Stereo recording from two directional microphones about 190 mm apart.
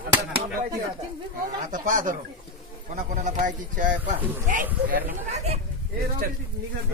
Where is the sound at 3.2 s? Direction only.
40° right (ahead or behind).